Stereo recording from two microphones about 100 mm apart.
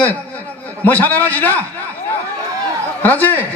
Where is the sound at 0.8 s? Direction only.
20° left (ahead or behind).